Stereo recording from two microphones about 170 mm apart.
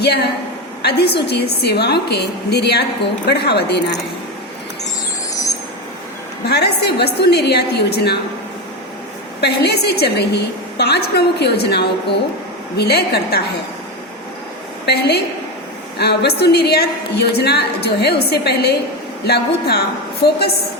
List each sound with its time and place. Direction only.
0.0 s a woman's voice: 70° left (ahead or behind)
5.3 s vehicle: 20° left (ahead or behind)
6.4 s a woman's voice: 75° left (ahead or behind)
9.4 s a woman's voice: 75° left (ahead or behind)
14.8 s a woman's voice: 75° left (ahead or behind)